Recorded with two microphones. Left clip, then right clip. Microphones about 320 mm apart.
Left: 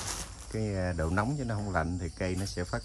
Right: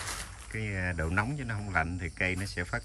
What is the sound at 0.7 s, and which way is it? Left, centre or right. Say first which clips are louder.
Speech: even; centre.